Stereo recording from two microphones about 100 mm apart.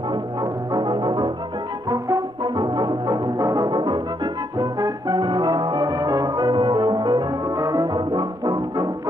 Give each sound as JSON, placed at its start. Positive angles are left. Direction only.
{"t": 0.1, "sound": "brass instrument", "side_deg": -45}